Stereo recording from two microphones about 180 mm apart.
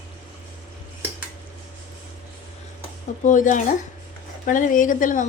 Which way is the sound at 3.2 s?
45° left (ahead or behind).